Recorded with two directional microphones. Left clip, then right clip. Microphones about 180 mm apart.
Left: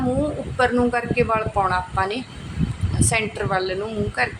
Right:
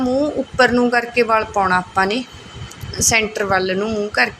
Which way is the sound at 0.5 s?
10° right (ahead or behind).